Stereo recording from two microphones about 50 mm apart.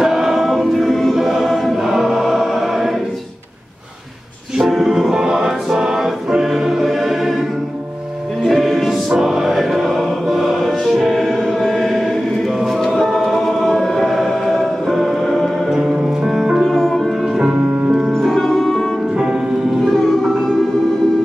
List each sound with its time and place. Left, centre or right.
0.0 s choir: centre
4.6 s music: centre
8.5 s music: centre
9.7 s choir: centre
10.6 s music: centre
11.4 s choir: centre
12.5 s music: centre
12.9 s choir: centre
15.7 s music: centre
16.6 s music: centre
17.3 s music: centre
17.7 s music: right
18.2 s music: centre